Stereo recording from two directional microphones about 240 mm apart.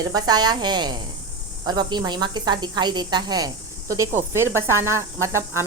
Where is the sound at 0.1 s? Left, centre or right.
Centre.